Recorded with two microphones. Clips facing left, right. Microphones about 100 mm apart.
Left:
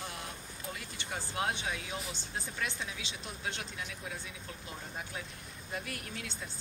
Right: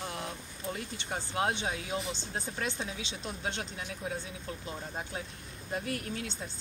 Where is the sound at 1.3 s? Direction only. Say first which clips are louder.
Right 4 dB; 25° right (ahead or behind).